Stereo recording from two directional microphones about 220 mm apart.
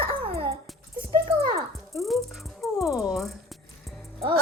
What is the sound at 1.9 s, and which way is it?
Music, centre (ahead or behind).